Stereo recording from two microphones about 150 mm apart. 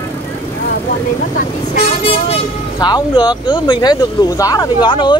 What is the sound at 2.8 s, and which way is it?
Speech, 30° left (ahead or behind).